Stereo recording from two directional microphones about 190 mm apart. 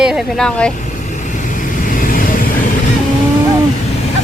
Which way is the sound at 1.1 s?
40° left (ahead or behind).